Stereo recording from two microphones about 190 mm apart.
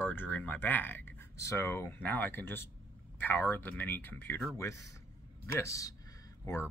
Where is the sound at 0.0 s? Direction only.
10° left (ahead or behind).